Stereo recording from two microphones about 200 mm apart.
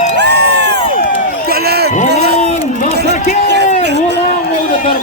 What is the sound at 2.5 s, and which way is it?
Crowd, 35° left (ahead or behind).